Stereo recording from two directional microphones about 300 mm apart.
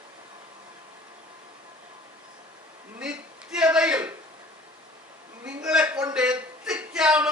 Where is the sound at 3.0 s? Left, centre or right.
Centre.